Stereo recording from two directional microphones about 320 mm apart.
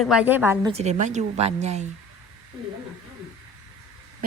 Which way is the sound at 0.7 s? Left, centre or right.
Right.